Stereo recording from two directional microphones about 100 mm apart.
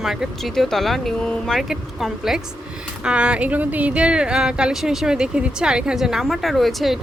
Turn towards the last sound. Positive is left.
turn(degrees=0)  # may be behind; listen again after turning